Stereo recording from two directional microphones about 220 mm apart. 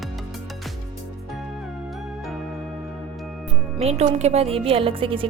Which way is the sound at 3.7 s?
30° right (ahead or behind).